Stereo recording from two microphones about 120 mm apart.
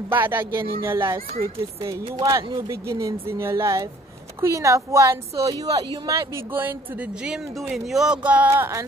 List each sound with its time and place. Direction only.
0.1 s a woman's voice: 20° right (ahead or behind)
7.7 s speech: centre (ahead or behind)
8.5 s a woman's voice: 25° right (ahead or behind)